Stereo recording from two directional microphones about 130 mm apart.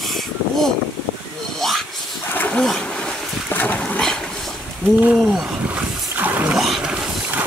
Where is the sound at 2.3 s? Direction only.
15° left (ahead or behind); by 6.6 s 10° right (ahead or behind).